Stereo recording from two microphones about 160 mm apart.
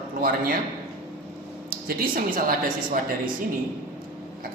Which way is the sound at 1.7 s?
65° right (ahead or behind).